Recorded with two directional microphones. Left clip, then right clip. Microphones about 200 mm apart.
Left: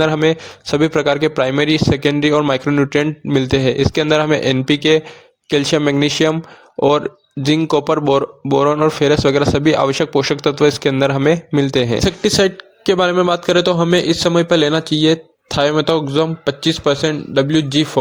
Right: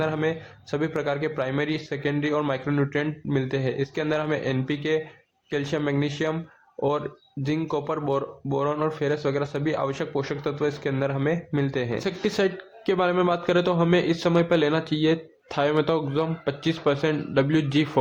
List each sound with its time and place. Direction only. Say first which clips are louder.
0.0 s a man's voice: left 11 dB; 45° left (ahead or behind)
11.9 s a man's voice: left 9 dB; 35° left (ahead or behind)